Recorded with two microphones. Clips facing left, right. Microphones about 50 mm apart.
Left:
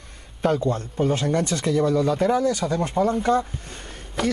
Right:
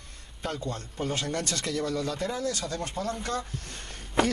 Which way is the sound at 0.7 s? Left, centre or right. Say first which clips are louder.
Left 9 dB; centre.